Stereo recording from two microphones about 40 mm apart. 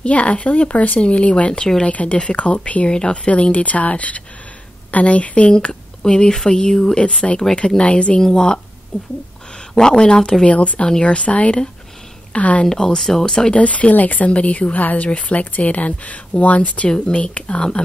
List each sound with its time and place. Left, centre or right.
0.0 s speech: left
1.5 s speech: centre
1.9 s speech: left
6.0 s speech: centre
8.2 s speech: centre
10.4 s speech: left
10.9 s speech: left
12.6 s speech: centre
13.5 s speech: left